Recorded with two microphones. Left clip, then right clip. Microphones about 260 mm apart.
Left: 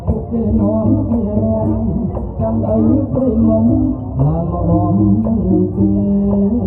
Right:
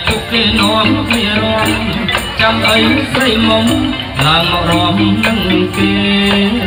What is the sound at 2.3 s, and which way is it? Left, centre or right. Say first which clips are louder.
Music: right 7 dB; right.